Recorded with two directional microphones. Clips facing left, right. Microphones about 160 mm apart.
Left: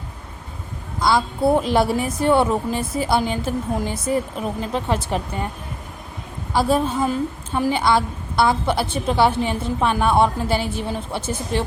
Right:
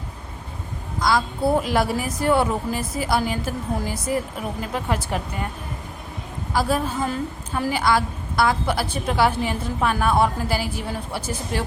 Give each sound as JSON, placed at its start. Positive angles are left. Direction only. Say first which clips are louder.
{"t": 1.0, "sound": "a woman's voice", "louder": "left 3 dB", "side_deg": 25}
{"t": 6.5, "sound": "a woman's voice", "louder": "left 4 dB", "side_deg": 25}